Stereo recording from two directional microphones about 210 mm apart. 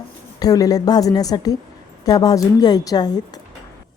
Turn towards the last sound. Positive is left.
turn(degrees=20)  # may be behind; listen again after turning